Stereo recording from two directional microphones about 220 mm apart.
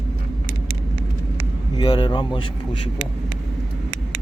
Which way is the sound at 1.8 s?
20° left (ahead or behind).